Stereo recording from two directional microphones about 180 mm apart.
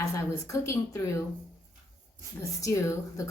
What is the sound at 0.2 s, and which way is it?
Speech, 15° left (ahead or behind).